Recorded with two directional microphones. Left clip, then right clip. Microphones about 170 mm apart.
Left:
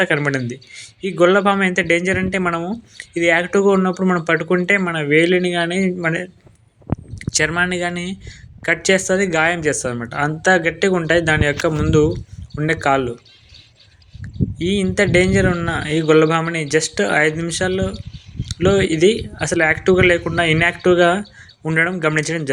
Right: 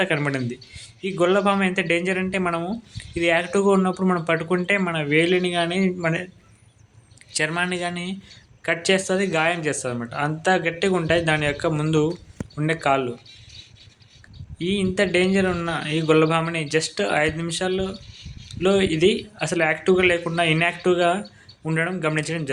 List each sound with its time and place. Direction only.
0.0 s speech: 20° left (ahead or behind)
14.6 s speech: 20° left (ahead or behind)